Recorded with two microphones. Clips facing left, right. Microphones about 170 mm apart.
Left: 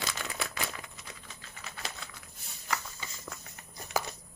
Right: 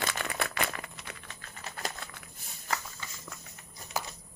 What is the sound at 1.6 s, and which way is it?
Patter, 45° right (ahead or behind).